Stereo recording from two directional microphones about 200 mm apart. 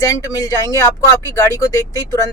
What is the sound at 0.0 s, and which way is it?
Speech, 15° left (ahead or behind).